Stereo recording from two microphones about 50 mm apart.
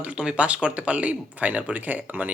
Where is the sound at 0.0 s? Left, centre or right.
Right.